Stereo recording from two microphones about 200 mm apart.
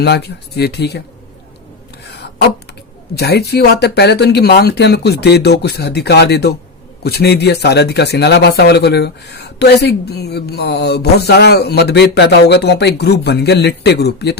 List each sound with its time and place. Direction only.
0.0 s speech: 55° left (ahead or behind)
3.2 s speech: 55° left (ahead or behind)